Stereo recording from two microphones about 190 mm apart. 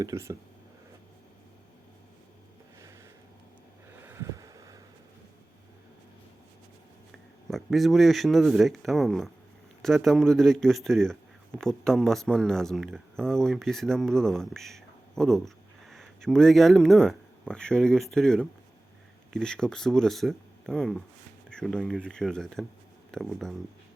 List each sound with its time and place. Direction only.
0.0 s speech: 15° right (ahead or behind)
4.0 s a sound: 15° right (ahead or behind)
7.5 s speech: centre (ahead or behind)